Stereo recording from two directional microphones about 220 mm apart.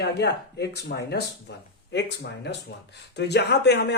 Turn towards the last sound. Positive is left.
turn(degrees=50)  # may be behind; listen again after turning